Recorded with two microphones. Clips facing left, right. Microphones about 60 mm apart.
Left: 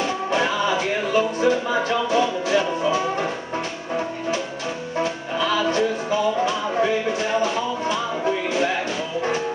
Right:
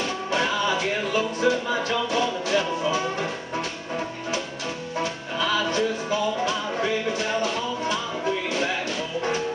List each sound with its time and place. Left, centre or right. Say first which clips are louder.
0.0 s music: left 3 dB; centre